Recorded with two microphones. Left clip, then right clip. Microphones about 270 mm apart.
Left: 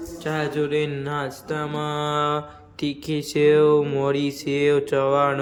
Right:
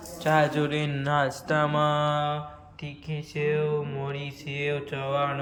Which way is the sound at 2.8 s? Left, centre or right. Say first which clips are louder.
Left 13 dB; left.